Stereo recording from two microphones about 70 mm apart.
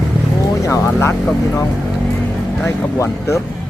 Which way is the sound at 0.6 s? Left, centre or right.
Left.